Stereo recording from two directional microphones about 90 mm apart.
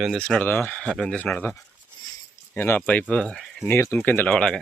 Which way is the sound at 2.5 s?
25° left (ahead or behind).